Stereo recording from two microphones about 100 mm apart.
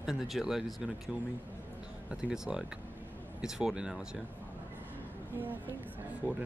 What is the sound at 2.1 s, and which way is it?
Speech, 10° right (ahead or behind).